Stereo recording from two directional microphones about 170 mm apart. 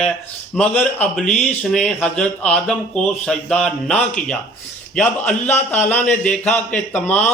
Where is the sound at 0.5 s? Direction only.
10° left (ahead or behind).